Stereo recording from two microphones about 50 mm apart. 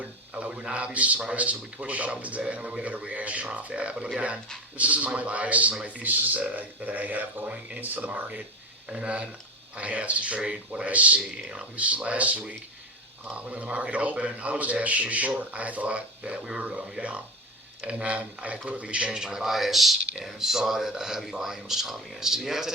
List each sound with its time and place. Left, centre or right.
0.0 s a man's voice: right
11.2 s speech: centre
11.8 s a man's voice: right; by 22.7 s centre